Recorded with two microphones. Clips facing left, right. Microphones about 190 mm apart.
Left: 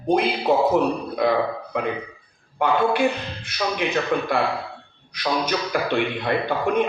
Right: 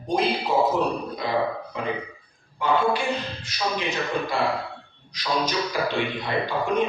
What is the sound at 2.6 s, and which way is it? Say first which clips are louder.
A man's voice: left 3 dB; 60° left (ahead or behind).